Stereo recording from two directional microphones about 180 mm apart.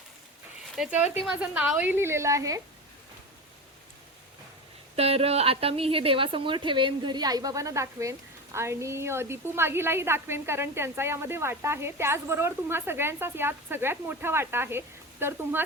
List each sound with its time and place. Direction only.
0.8 s a woman's voice: 5° right (ahead or behind)
4.9 s a woman's voice: 35° right (ahead or behind); by 15.6 s 15° right (ahead or behind)